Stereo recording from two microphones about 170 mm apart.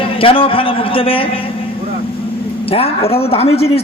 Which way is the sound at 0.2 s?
30° left (ahead or behind).